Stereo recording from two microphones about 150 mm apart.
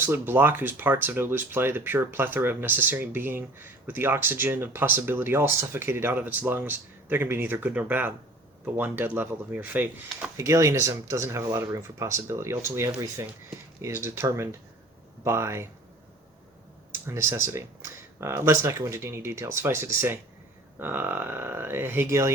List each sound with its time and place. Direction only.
0.0 s speech: 15° right (ahead or behind)
16.9 s speech: 15° right (ahead or behind)